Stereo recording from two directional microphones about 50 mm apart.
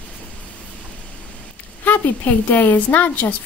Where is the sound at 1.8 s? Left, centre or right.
Left.